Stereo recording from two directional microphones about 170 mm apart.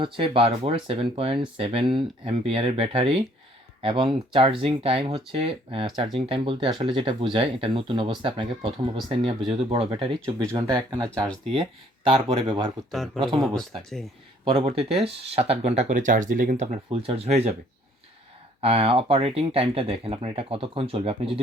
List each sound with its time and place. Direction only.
0.0 s speech: 30° right (ahead or behind)
10.2 s speech: 20° right (ahead or behind)
13.2 s speech: 5° right (ahead or behind)
14.4 s speech: 30° right (ahead or behind); by 16.6 s 50° right (ahead or behind)
16.9 s speech: 35° right (ahead or behind)
18.6 s speech: 35° right (ahead or behind)